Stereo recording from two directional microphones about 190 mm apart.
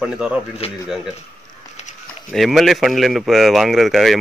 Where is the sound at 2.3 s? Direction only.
Centre (ahead or behind).